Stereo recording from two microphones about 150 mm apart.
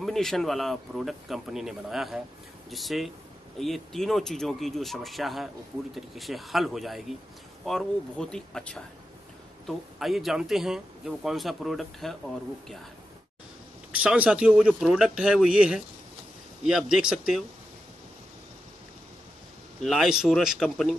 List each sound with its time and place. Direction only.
0.0 s speech: centre (ahead or behind)
13.9 s speech: 10° right (ahead or behind)
19.8 s speech: centre (ahead or behind)